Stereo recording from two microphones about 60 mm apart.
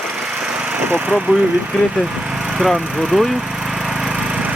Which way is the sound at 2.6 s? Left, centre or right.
Centre.